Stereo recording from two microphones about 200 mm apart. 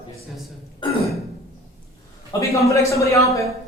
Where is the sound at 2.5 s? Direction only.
15° left (ahead or behind).